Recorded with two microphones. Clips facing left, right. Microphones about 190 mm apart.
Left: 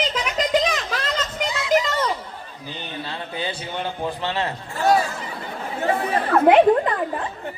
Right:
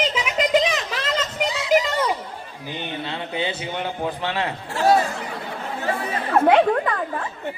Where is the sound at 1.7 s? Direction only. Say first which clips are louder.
Right 1 dB; 10° right (ahead or behind).